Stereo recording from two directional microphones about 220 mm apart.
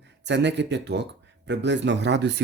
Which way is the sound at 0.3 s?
50° right (ahead or behind).